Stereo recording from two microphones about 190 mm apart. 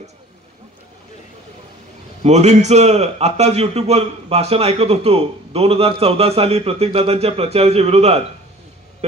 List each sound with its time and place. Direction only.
2.2 s a man's voice: 35° right (ahead or behind)